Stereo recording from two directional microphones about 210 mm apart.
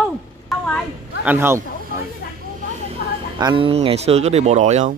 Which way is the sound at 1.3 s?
10° right (ahead or behind).